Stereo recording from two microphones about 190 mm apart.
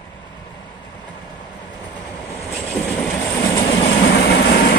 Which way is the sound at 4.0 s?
50° left (ahead or behind).